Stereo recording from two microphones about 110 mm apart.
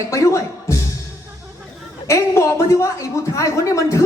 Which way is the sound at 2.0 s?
25° left (ahead or behind).